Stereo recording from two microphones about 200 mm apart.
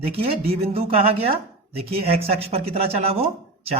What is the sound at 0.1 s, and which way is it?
Speech, 30° right (ahead or behind).